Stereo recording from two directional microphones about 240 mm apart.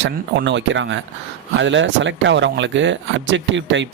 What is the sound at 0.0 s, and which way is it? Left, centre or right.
Speech, right.